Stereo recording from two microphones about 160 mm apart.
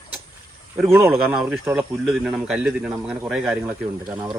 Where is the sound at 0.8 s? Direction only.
15° right (ahead or behind).